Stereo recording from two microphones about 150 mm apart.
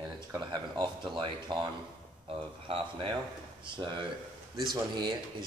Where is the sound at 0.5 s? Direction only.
30° right (ahead or behind).